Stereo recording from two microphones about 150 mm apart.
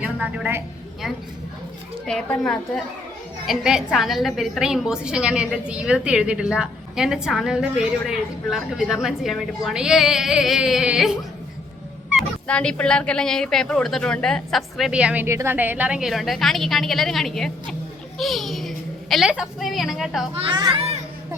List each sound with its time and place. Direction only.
0.0 s a woman's voice: 10° right (ahead or behind)
2.0 s a woman's voice: 5° left (ahead or behind)
12.5 s a woman's voice: 10° left (ahead or behind)
20.3 s a child's voice: 30° right (ahead or behind)